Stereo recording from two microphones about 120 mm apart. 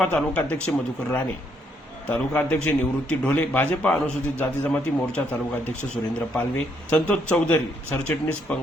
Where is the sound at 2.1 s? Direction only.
10° left (ahead or behind).